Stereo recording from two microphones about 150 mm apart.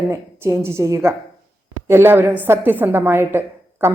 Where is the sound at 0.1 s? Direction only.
15° right (ahead or behind).